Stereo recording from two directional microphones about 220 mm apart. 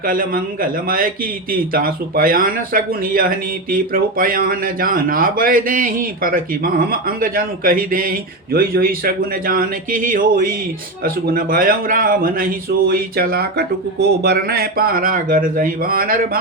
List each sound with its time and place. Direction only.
0.0 s speech: 40° right (ahead or behind)